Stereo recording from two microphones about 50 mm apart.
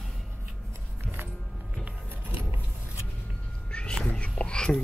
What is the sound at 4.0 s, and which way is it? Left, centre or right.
Whispering, left.